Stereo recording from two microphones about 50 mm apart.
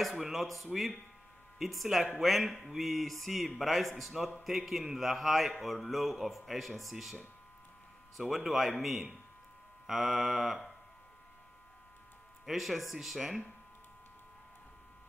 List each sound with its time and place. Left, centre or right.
0.0 s a man's voice: centre
8.2 s a man's voice: centre
12.4 s a man's voice: centre